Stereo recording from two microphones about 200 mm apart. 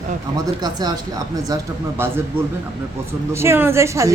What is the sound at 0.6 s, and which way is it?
Speech, 20° right (ahead or behind).